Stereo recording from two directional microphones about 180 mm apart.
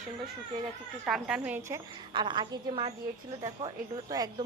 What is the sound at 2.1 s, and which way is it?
A woman's voice, 25° right (ahead or behind).